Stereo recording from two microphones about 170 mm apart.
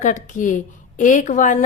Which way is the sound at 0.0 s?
50° left (ahead or behind).